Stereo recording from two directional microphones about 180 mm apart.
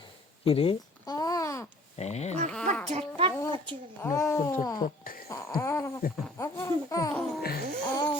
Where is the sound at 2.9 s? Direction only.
35° right (ahead or behind).